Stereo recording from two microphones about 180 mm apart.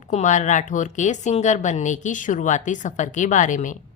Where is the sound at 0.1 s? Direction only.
45° left (ahead or behind).